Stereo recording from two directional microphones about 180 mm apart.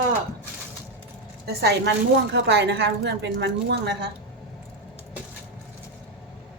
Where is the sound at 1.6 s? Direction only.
70° right (ahead or behind).